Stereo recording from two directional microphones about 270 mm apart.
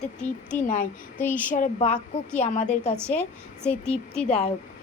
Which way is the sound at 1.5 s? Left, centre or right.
Left.